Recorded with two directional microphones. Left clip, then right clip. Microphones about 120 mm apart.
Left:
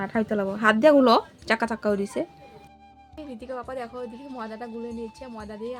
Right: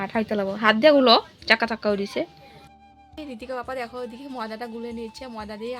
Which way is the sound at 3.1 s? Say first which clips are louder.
Right 3 dB; 15° right (ahead or behind).